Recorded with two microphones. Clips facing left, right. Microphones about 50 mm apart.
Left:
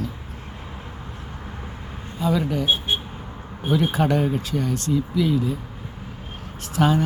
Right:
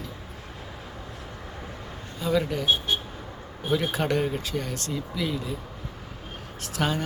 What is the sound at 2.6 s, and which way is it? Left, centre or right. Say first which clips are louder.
Speech: left 2 dB; left.